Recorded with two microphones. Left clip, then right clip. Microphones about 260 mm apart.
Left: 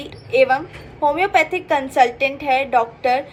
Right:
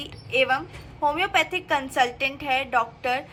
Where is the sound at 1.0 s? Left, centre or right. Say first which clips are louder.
Left 6 dB; centre.